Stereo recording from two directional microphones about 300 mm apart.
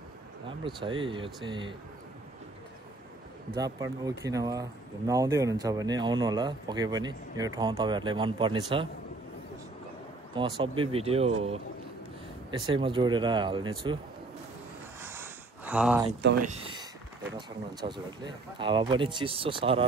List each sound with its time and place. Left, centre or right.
0.7 s speech: centre
3.5 s speech: centre
10.3 s speech: centre
15.0 s a sound: centre
16.2 s speech: right
16.5 s speech: centre